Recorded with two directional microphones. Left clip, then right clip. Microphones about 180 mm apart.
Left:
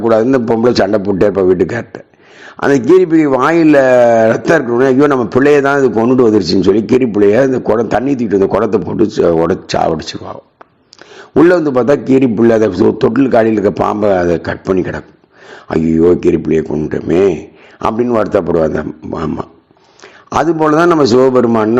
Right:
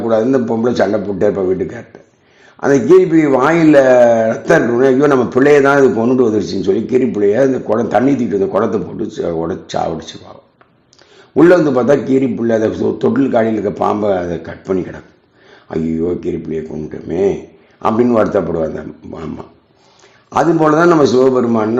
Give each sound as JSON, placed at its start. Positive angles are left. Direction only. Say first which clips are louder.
{"t": 0.1, "sound": "a man's voice", "louder": "left 2 dB", "side_deg": 30}
{"t": 11.3, "sound": "a man's voice", "louder": "even", "side_deg": 30}